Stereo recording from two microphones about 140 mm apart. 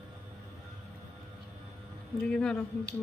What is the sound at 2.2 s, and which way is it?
Speech, 5° left (ahead or behind).